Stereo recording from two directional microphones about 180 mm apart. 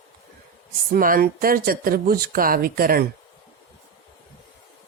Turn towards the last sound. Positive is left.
turn(degrees=-55)  # may be behind; listen again after turning